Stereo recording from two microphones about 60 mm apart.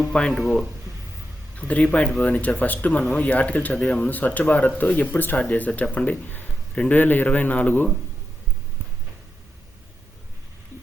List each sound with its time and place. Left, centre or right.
0.0 s speech: centre
1.5 s speech: left